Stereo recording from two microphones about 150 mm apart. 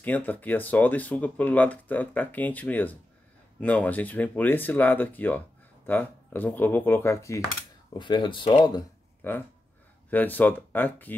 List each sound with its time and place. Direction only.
0.0 s speech: 10° left (ahead or behind)
7.9 s speech: 30° left (ahead or behind)
9.2 s speech: 15° left (ahead or behind)